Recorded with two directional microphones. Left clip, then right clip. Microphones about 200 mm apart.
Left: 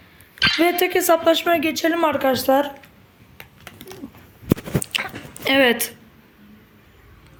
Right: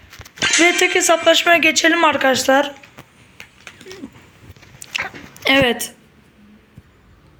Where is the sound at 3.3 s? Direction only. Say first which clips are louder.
Right 3 dB; 40° left (ahead or behind).